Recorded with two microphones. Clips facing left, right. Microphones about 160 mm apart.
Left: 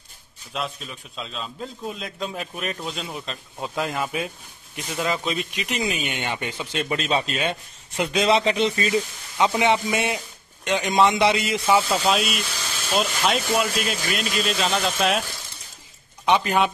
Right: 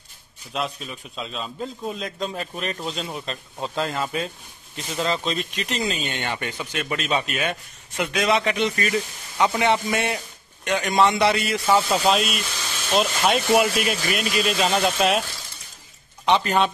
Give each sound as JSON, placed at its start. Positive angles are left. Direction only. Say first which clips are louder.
{"t": 0.5, "sound": "a man's voice", "louder": "right 2 dB", "side_deg": 0}
{"t": 3.7, "sound": "a man's voice", "louder": "even", "side_deg": 10}
{"t": 11.9, "sound": "a man's voice", "louder": "right 1 dB", "side_deg": 0}
{"t": 16.3, "sound": "speech", "louder": "even", "side_deg": 10}